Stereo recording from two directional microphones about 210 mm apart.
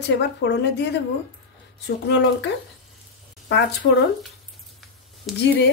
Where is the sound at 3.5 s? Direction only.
55° left (ahead or behind).